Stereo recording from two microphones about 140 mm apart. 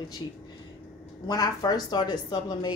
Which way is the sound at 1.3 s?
30° left (ahead or behind).